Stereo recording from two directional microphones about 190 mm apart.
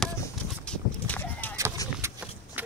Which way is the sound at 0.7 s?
10° left (ahead or behind).